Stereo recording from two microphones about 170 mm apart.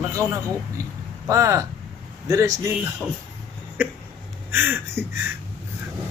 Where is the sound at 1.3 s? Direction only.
20° right (ahead or behind).